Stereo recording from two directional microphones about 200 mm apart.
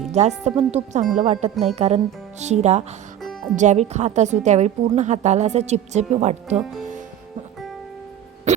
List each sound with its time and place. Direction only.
0.1 s a woman's voice: 35° right (ahead or behind)
8.5 s music: 35° right (ahead or behind)